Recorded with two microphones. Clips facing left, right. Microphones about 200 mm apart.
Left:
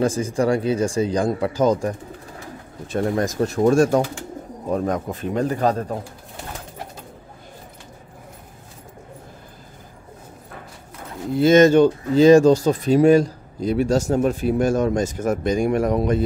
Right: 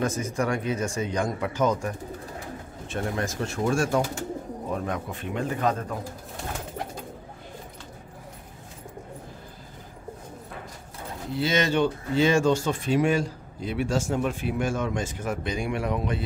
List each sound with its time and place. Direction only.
0.0 s speech: 30° left (ahead or behind)
11.3 s speech: 45° left (ahead or behind)